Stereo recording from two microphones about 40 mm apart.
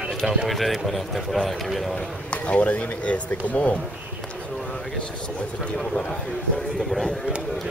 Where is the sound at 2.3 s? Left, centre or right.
Left.